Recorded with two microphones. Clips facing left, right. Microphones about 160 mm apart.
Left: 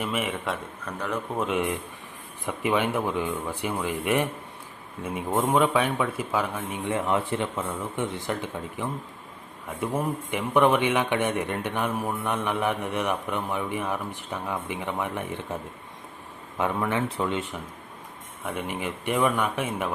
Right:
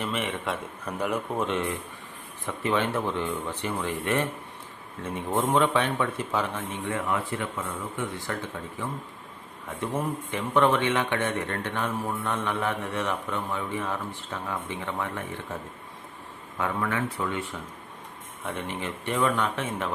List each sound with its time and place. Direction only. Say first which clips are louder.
0.0 s speech: left 1 dB; 5° left (ahead or behind)
0.9 s speech: right 2 dB; 10° right (ahead or behind)
1.4 s a man's voice: left 2 dB; 5° left (ahead or behind)
6.9 s a man's voice: left 4 dB; 25° left (ahead or behind)
16.6 s speech: left 2 dB; 20° left (ahead or behind)
18.4 s a man's voice: left 2 dB; 10° left (ahead or behind)